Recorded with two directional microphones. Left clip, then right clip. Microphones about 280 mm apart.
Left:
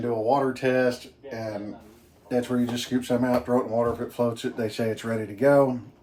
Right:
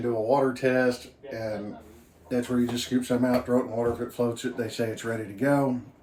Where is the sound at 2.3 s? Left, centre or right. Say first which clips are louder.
Left 2 dB; centre.